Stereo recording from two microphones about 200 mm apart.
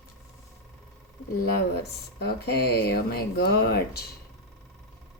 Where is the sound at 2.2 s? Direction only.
55° left (ahead or behind).